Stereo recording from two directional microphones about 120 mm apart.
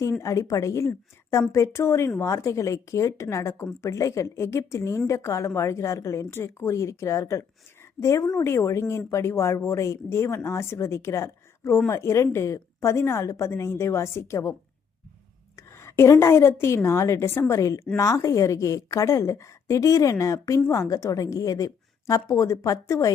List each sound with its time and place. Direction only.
0.0 s a woman's voice: 25° left (ahead or behind)
15.5 s a woman's voice: 25° left (ahead or behind)